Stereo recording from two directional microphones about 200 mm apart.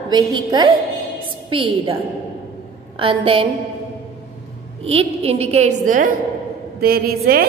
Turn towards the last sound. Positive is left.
turn(degrees=-50)  # may be behind; listen again after turning